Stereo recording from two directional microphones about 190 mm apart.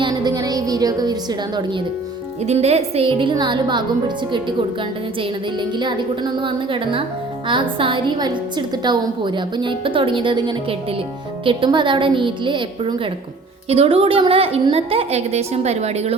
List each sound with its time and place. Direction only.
0.0 s a woman's voice: 20° right (ahead or behind)
2.5 s a woman's voice: 35° right (ahead or behind)
5.5 s a woman's voice: 25° right (ahead or behind)